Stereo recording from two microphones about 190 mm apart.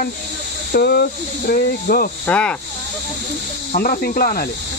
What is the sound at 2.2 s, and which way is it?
Speech, 5° left (ahead or behind).